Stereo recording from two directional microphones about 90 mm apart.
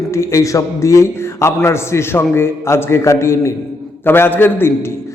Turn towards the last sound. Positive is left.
turn(degrees=25)  # may be behind; listen again after turning